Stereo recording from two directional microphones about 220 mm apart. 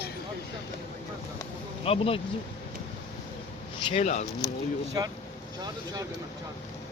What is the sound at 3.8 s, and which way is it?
Speech, 30° left (ahead or behind).